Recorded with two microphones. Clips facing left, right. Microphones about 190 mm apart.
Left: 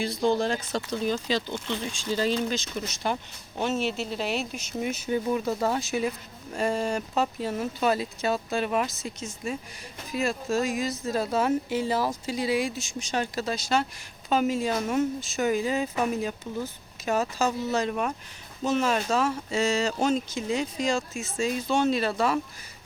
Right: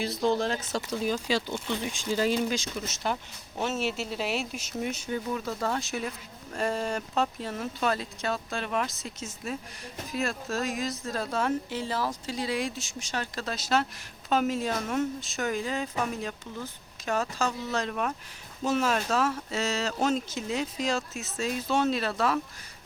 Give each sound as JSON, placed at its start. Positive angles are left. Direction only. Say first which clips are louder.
{"t": 0.0, "sound": "speech", "louder": "left 2 dB", "side_deg": 0}
{"t": 2.7, "sound": "speech", "louder": "left 2 dB", "side_deg": 0}
{"t": 5.1, "sound": "speech", "louder": "left 8 dB", "side_deg": 15}
{"t": 12.8, "sound": "speech", "louder": "left 5 dB", "side_deg": 15}
{"t": 13.4, "sound": "speech", "louder": "right 2 dB", "side_deg": 0}
{"t": 18.6, "sound": "speech", "louder": "left 2 dB", "side_deg": -5}